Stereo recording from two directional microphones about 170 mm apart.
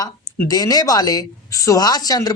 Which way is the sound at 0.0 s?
20° left (ahead or behind).